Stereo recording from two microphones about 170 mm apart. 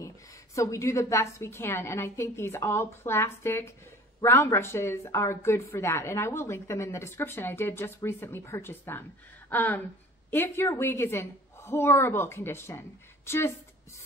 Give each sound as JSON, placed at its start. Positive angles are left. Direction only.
{"t": 0.6, "sound": "speech", "side_deg": 15}